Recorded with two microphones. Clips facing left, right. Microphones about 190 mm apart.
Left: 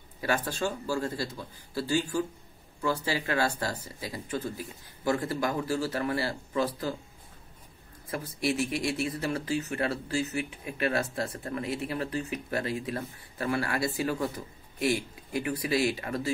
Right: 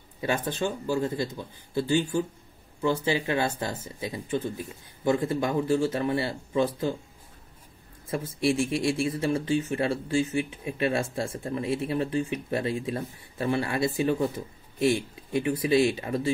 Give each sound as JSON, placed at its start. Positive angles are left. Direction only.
{"t": 0.2, "sound": "speech", "side_deg": -20}
{"t": 8.1, "sound": "speech", "side_deg": -25}